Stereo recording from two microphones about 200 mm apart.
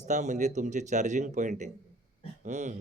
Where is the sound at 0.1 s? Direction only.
35° right (ahead or behind).